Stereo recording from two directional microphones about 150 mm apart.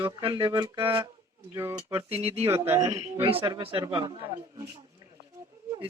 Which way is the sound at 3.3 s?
40° right (ahead or behind).